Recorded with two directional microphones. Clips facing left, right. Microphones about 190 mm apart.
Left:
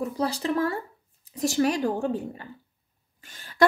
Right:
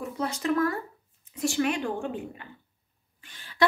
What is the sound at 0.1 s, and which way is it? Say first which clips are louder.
A woman's voice: left 1 dB; 35° left (ahead or behind).